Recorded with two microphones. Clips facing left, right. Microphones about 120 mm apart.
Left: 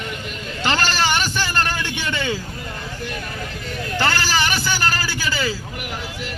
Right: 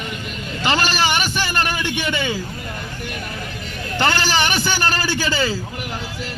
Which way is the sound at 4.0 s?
20° right (ahead or behind).